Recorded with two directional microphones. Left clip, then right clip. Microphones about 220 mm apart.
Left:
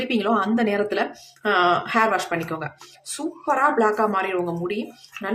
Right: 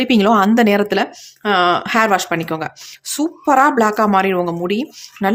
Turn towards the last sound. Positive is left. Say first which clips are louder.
# right 10 dB
turn(degrees=-50)  # may be behind; listen again after turning